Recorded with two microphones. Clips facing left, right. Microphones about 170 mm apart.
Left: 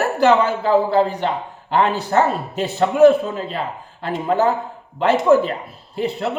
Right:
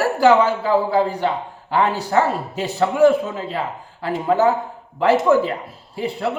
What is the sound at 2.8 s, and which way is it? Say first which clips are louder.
Speech: left 3 dB; 20° left (ahead or behind).